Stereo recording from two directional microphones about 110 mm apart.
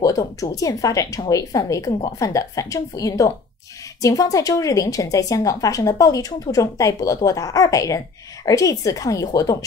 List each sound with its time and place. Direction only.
0.0 s a woman's voice: 30° left (ahead or behind)